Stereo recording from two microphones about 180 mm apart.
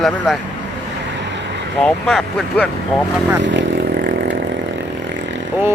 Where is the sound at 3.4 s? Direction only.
90° right.